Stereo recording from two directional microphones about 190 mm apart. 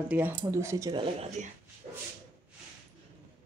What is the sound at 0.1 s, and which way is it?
Speech, 10° right (ahead or behind).